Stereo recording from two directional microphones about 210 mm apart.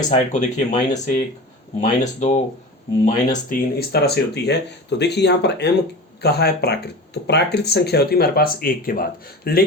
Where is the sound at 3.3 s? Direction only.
45° left (ahead or behind).